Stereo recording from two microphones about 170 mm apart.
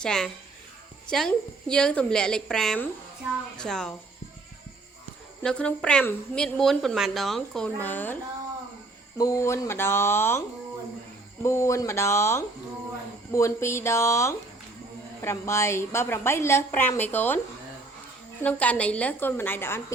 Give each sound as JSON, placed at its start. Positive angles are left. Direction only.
{"t": 0.0, "sound": "a woman's voice", "side_deg": 5}
{"t": 5.4, "sound": "a woman's voice", "side_deg": 5}
{"t": 11.4, "sound": "a woman's voice", "side_deg": 15}
{"t": 18.4, "sound": "a woman's voice", "side_deg": 10}